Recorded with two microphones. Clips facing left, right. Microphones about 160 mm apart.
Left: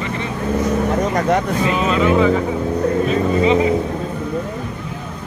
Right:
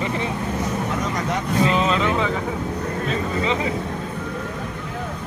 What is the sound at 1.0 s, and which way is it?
Speech, 55° left (ahead or behind).